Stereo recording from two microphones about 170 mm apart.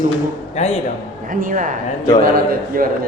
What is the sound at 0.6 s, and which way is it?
Speech, 40° left (ahead or behind).